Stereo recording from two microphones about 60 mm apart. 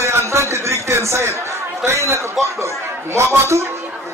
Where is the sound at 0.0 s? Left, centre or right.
Right.